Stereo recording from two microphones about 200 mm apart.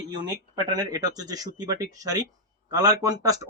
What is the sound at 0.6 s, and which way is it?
Speech, 20° right (ahead or behind).